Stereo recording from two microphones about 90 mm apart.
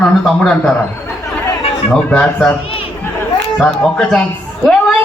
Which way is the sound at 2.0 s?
15° left (ahead or behind).